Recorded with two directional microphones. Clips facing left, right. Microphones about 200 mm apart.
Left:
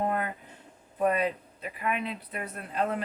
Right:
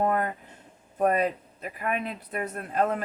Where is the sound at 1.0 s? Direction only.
45° right (ahead or behind).